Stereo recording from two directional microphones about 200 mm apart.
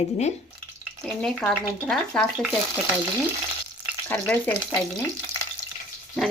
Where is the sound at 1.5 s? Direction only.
Centre (ahead or behind).